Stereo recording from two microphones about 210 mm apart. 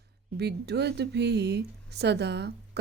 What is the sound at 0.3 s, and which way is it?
Speech, 50° right (ahead or behind).